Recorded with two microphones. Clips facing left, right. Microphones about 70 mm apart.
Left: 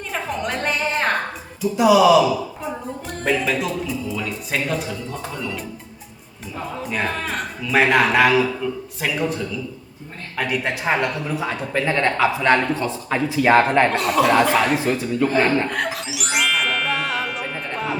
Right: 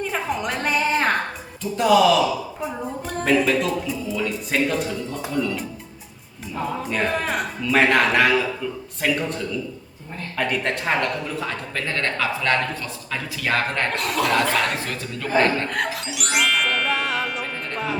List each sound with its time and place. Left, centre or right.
0.0 s a sound: centre
1.7 s a man's voice: centre
5.3 s speech: centre
6.6 s a man's voice: centre
13.9 s a man's voice: centre
14.8 s speech: centre
15.7 s music: centre